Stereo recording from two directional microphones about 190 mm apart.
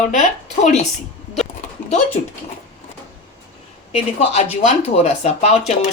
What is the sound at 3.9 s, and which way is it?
Speech, 35° left (ahead or behind).